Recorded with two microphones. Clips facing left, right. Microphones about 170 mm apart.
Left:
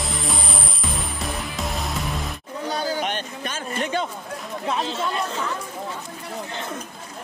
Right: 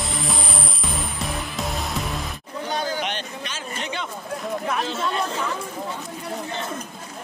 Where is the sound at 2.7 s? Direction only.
40° left (ahead or behind).